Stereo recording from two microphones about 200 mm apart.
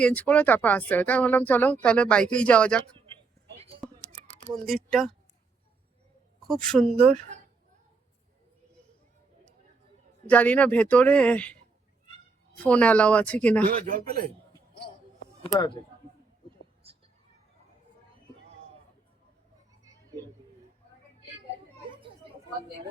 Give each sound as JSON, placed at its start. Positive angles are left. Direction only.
{"t": 0.0, "sound": "speech", "side_deg": 5}
{"t": 4.5, "sound": "speech", "side_deg": 0}
{"t": 6.5, "sound": "speech", "side_deg": 0}
{"t": 7.0, "sound": "speech", "side_deg": -30}
{"t": 10.2, "sound": "speech", "side_deg": 5}
{"t": 12.5, "sound": "speech", "side_deg": 5}
{"t": 13.7, "sound": "speech", "side_deg": -45}
{"t": 15.5, "sound": "speech", "side_deg": 20}
{"t": 21.8, "sound": "children playing", "side_deg": -25}